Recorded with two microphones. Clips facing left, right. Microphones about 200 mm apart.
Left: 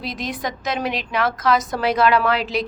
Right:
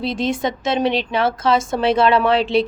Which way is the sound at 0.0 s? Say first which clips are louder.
Right 7 dB; 25° right (ahead or behind).